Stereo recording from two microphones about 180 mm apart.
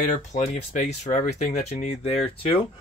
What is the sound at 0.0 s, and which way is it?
Speech, 40° left (ahead or behind).